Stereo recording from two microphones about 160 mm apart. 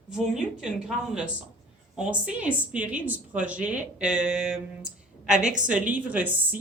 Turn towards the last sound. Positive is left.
turn(degrees=-10)  # may be behind; listen again after turning